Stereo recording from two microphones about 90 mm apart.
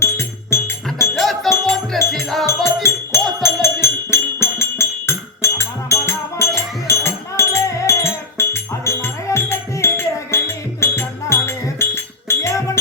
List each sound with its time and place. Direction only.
0.0 s music: 30° left (ahead or behind)
1.1 s music: centre (ahead or behind)
2.5 s music: 30° left (ahead or behind)